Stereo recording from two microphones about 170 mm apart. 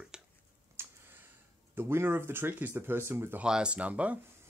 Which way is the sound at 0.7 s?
10° right (ahead or behind).